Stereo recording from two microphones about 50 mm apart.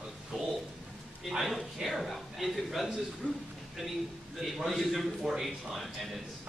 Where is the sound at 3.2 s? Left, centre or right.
Left.